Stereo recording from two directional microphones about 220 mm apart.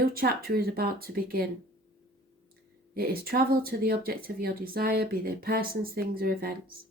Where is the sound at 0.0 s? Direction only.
45° right (ahead or behind).